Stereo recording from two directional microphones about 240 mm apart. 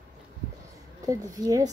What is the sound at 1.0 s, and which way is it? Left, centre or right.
Speech, centre.